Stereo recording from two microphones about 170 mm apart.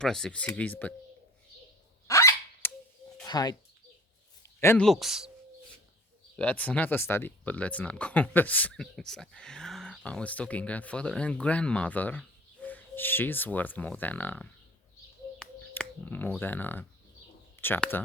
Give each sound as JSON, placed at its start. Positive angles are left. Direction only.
{"t": 0.0, "sound": "speech", "side_deg": 5}
{"t": 2.0, "sound": "a sound", "side_deg": 15}
{"t": 3.2, "sound": "speech", "side_deg": 25}
{"t": 4.6, "sound": "speech", "side_deg": 15}
{"t": 4.9, "sound": "speech", "side_deg": 0}
{"t": 6.3, "sound": "speech", "side_deg": 10}
{"t": 15.4, "sound": "a sound", "side_deg": 5}
{"t": 16.4, "sound": "speech", "side_deg": 10}